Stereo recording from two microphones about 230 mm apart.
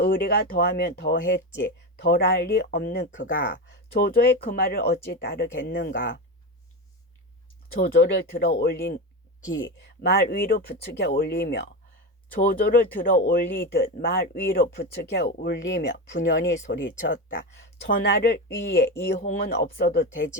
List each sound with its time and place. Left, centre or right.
0.0 s speech: left
7.7 s speech: left
9.4 s speech: left
17.2 s speech: left
19.2 s speech: left